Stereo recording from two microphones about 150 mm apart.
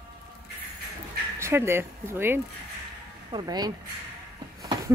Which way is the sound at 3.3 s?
25° right (ahead or behind).